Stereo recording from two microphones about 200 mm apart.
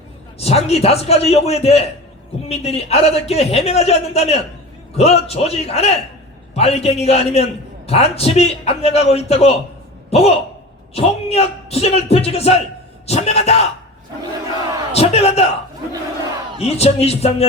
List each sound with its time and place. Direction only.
0.3 s a man's voice: 30° left (ahead or behind)
14.9 s a man's voice: 30° left (ahead or behind)
16.6 s a man's voice: 30° left (ahead or behind)